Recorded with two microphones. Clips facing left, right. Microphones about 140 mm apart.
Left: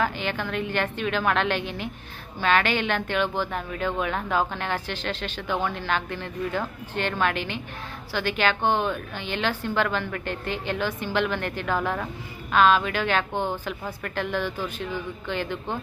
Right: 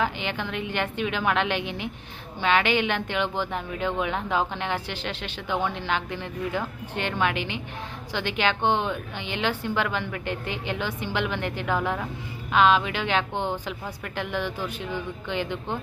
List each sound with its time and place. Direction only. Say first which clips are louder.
0.0 s speech: left 1 dB; 15° right (ahead or behind)